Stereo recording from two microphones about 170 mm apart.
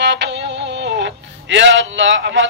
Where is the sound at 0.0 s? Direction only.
90° right.